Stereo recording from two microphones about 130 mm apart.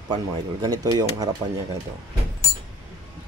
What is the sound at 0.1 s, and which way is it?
Speech, 30° right (ahead or behind).